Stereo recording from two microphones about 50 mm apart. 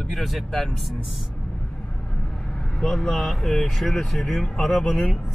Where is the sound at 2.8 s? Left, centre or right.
Centre.